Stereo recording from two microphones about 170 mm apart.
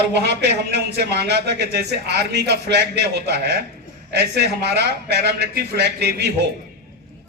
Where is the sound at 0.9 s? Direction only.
75° right (ahead or behind).